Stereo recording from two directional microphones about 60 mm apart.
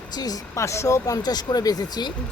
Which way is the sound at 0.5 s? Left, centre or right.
Left.